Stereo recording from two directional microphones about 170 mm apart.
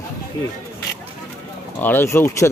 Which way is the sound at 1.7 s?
10° left (ahead or behind).